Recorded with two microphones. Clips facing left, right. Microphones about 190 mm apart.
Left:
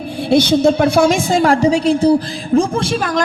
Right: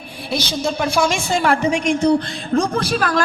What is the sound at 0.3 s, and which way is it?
Speech, 60° left (ahead or behind).